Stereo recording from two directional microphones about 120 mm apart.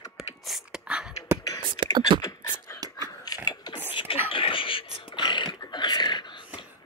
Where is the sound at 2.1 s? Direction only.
45° right (ahead or behind).